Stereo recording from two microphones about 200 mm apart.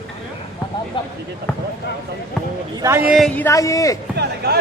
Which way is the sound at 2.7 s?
15° right (ahead or behind).